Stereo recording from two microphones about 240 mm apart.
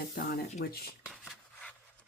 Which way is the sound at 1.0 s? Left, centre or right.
Centre.